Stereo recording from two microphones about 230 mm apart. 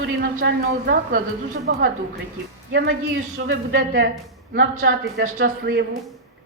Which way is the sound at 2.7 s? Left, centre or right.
Right.